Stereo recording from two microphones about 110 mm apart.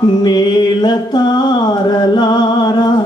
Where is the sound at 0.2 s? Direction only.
40° left (ahead or behind).